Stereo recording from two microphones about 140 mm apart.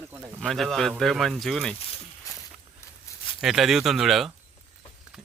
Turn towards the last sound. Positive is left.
turn(degrees=0)  # may be behind; listen again after turning